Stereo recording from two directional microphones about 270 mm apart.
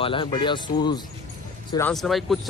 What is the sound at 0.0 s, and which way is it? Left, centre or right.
Speech, centre.